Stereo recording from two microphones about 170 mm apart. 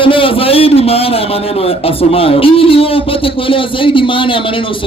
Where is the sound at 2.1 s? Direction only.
35° left (ahead or behind).